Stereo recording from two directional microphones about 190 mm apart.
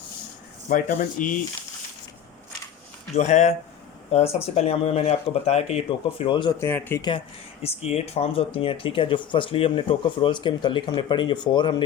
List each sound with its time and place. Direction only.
0.7 s speech: 45° left (ahead or behind)
3.2 s speech: 35° left (ahead or behind); by 7.0 s 10° left (ahead or behind)
7.6 s speech: 35° left (ahead or behind)